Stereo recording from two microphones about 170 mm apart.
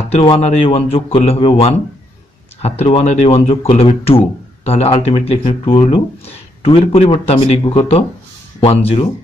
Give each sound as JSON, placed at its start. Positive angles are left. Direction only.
{"t": 0.1, "sound": "speech", "side_deg": 35}
{"t": 2.8, "sound": "speech", "side_deg": 35}